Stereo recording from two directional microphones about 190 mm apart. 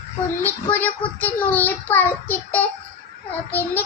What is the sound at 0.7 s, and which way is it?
Child singing, 10° left (ahead or behind).